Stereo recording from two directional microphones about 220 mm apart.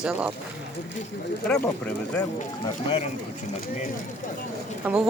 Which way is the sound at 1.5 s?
5° left (ahead or behind).